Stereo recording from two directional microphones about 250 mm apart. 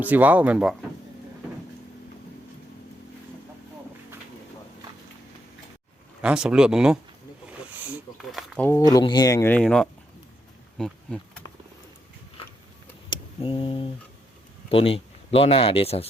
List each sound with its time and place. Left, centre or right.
0.0 s speech: centre
6.2 s speech: centre
7.8 s snake: centre
8.9 s speech: centre
10.8 s bee: centre
13.1 s a sound: left
14.7 s speech: left